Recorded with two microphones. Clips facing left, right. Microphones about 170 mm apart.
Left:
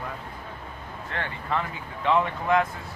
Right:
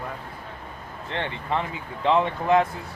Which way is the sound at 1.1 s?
25° right (ahead or behind).